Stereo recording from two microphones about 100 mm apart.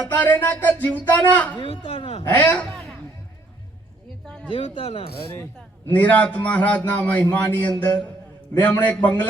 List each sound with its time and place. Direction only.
0.1 s a man's voice: 20° left (ahead or behind)
1.5 s a woman's voice: 55° left (ahead or behind); by 2.2 s 80° left
2.2 s speech: 15° left (ahead or behind)
4.4 s a woman's voice: 65° left (ahead or behind)
5.9 s a man's voice: 15° left (ahead or behind)